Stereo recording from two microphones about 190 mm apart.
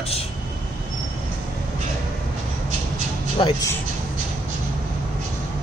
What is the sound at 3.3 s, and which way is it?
Speech, 25° left (ahead or behind).